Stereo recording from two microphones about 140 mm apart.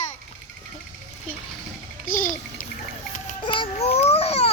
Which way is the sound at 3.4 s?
40° left (ahead or behind).